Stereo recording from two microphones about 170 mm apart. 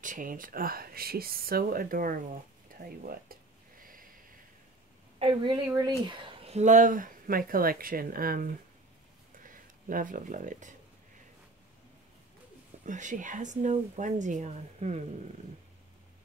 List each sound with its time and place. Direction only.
0.0 s speech: 50° right (ahead or behind)
5.2 s a woman's voice: 30° right (ahead or behind); by 10.7 s 50° right (ahead or behind)
12.8 s speech: 50° right (ahead or behind)